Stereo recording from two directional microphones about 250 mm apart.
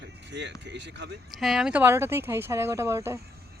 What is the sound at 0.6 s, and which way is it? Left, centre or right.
Speech, right.